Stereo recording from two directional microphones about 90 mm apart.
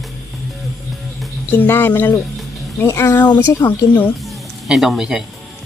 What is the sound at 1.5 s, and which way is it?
Speech, 25° left (ahead or behind).